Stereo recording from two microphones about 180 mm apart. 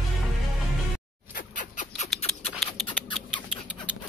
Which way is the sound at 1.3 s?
45° left (ahead or behind).